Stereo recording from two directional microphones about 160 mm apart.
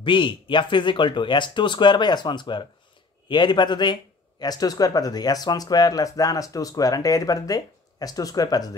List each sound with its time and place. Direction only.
0.0 s speech: 30° left (ahead or behind)